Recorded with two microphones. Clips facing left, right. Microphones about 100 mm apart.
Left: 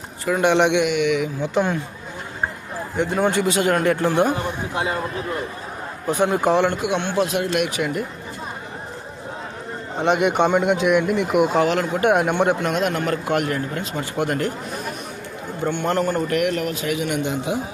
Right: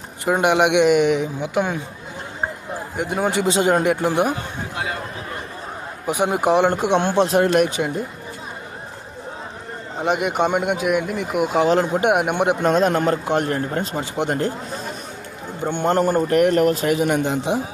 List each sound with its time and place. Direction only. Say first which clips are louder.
0.4 s speech: right 1 dB; 15° right (ahead or behind)
0.9 s a man's voice: right 4 dB; 40° right (ahead or behind)
1.4 s speech: left 1 dB; 10° right (ahead or behind)
3.0 s speech: left 1 dB; 10° right (ahead or behind)
4.7 s a sound: left 2 dB; 25° left (ahead or behind)
6.1 s speech: even; 15° right (ahead or behind)
6.7 s a man's voice: right 4 dB; 35° right (ahead or behind)
10.0 s speech: left 2 dB; centre (ahead or behind)
11.7 s speech: right 1 dB; 25° right (ahead or behind)
12.6 s a man's voice: right 5 dB; 35° right (ahead or behind)
14.0 s a man's voice: left 2 dB; 25° right (ahead or behind)